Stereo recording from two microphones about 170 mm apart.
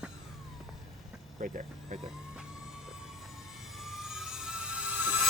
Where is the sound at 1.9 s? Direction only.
45° right (ahead or behind).